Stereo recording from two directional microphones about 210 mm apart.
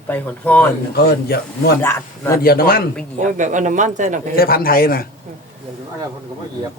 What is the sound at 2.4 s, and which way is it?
Speech, 45° left (ahead or behind).